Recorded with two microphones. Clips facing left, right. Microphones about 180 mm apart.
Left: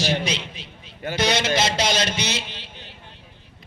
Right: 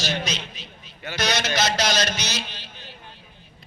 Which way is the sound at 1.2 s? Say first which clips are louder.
Left 3 dB; 25° left (ahead or behind).